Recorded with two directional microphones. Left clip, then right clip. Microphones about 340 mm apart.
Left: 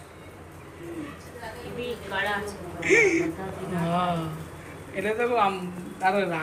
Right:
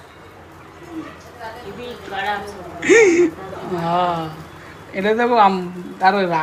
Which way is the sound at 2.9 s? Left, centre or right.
Right.